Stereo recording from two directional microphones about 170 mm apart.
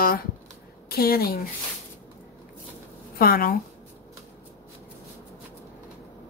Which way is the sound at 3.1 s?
60° left (ahead or behind).